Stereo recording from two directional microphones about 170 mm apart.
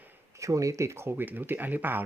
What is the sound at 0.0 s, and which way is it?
Speech, 20° right (ahead or behind).